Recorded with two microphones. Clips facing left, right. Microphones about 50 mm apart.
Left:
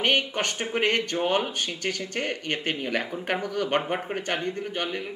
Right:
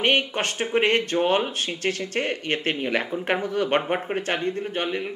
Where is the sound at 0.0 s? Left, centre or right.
Right.